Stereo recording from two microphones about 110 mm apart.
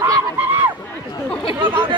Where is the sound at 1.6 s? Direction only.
20° right (ahead or behind).